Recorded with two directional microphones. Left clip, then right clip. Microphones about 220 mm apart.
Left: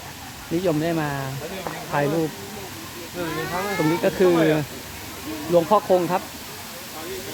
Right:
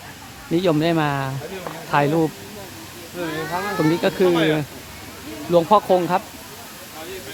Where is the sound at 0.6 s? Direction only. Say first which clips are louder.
Right 4 dB; 25° right (ahead or behind).